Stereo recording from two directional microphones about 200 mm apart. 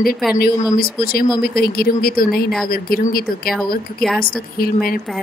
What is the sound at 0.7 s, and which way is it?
Speech, 50° left (ahead or behind).